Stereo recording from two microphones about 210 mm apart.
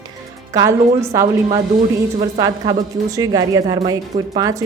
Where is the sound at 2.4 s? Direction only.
20° right (ahead or behind).